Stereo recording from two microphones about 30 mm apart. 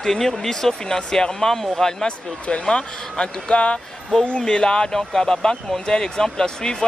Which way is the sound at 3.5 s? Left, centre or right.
Left.